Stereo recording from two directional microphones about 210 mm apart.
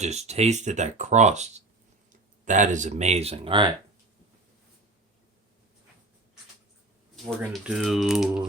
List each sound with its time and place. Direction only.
0.0 s speech: 30° right (ahead or behind)
7.3 s speech: centre (ahead or behind)